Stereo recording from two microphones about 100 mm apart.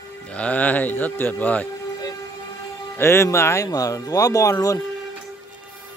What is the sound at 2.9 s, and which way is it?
Speech, 25° left (ahead or behind).